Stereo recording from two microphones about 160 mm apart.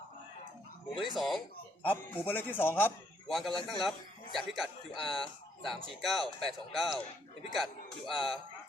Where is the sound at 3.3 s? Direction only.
Centre (ahead or behind).